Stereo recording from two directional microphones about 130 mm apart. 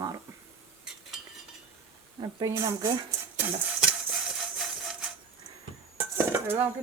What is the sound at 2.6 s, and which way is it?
Speech, 30° right (ahead or behind).